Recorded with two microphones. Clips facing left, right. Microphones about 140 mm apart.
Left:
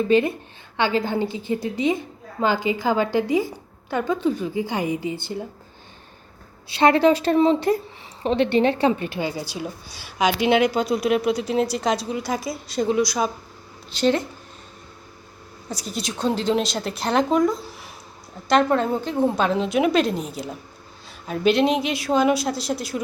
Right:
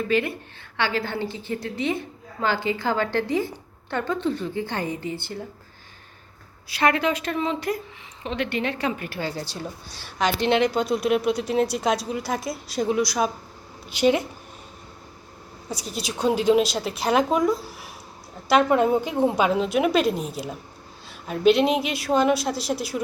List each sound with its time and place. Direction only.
0.1 s a woman's voice: 20° left (ahead or behind)
6.7 s a woman's voice: 25° left (ahead or behind); by 14.3 s 10° right (ahead or behind)
15.7 s a woman's voice: 5° right (ahead or behind)